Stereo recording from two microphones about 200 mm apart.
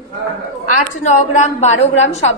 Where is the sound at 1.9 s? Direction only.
70° left (ahead or behind).